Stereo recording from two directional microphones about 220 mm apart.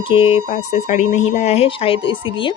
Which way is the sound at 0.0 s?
25° left (ahead or behind).